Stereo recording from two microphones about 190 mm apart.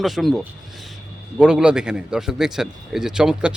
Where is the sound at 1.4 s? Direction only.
5° right (ahead or behind).